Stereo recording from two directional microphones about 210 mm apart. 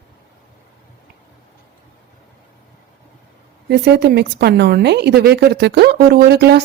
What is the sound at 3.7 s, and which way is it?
A woman's voice, 55° right (ahead or behind).